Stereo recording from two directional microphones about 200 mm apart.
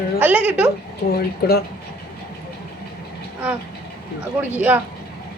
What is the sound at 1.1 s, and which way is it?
Speech, 50° left (ahead or behind).